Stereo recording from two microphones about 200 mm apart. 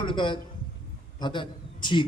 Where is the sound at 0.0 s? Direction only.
25° left (ahead or behind).